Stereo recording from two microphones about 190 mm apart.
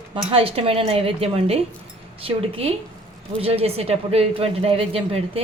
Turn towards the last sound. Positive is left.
turn(degrees=-30)  # may be behind; listen again after turning